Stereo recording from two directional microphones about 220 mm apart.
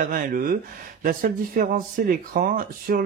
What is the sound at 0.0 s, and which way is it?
Speech, 40° right (ahead or behind).